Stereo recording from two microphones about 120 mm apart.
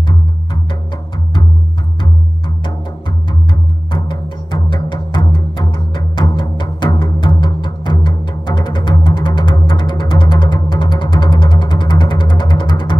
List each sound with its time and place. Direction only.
2.0 s music: 40° left (ahead or behind)
3.9 s music: 40° left (ahead or behind)